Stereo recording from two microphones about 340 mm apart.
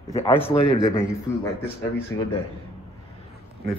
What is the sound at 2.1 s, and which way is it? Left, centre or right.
Speech, left.